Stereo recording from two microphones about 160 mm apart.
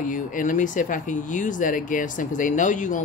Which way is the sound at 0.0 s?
55° left (ahead or behind).